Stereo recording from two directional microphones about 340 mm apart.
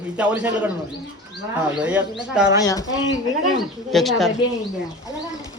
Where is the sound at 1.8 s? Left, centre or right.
Centre.